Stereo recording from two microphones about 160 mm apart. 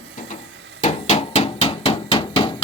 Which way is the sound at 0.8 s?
45° left (ahead or behind).